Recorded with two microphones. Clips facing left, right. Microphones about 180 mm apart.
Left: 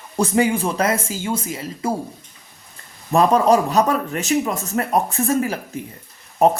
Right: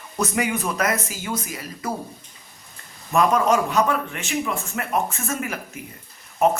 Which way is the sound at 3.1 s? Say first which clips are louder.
Left 4 dB; 35° left (ahead or behind).